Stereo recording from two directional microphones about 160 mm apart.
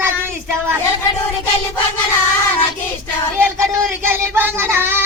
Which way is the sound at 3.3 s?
15° right (ahead or behind).